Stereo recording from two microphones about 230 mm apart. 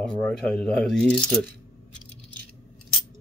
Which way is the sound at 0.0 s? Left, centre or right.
Centre.